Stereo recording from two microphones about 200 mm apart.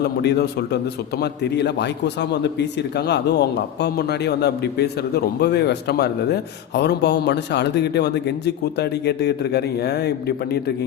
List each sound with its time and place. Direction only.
0.2 s a man's voice: 55° left (ahead or behind)